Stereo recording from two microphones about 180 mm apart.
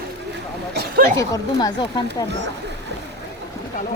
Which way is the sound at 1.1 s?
20° left (ahead or behind).